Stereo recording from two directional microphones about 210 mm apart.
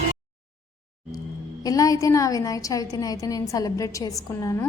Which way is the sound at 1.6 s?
15° left (ahead or behind).